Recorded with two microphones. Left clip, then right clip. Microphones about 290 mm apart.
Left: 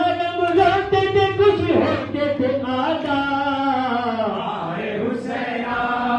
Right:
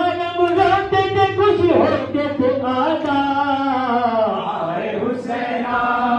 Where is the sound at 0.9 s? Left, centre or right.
Centre.